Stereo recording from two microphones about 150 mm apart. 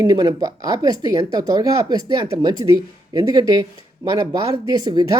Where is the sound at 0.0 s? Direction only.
25° right (ahead or behind).